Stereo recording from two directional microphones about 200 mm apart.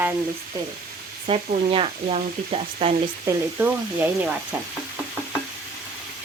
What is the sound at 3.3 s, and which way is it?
Speech, 10° right (ahead or behind).